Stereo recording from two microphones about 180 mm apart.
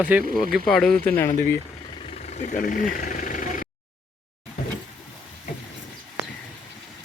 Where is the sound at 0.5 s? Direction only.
Centre (ahead or behind).